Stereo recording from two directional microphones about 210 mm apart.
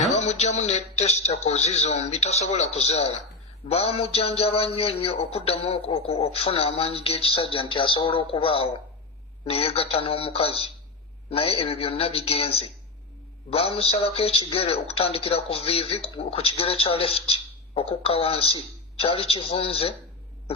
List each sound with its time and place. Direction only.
0.0 s a man's voice: 35° left (ahead or behind)